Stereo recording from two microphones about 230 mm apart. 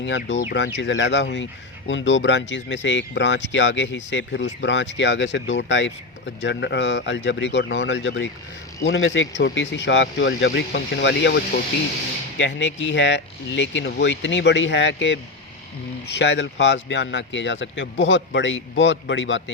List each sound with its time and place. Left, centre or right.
0.0 s speech: left